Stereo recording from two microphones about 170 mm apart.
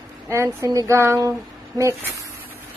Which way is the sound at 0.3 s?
20° right (ahead or behind).